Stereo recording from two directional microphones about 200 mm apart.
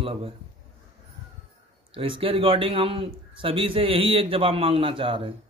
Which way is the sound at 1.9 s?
25° right (ahead or behind).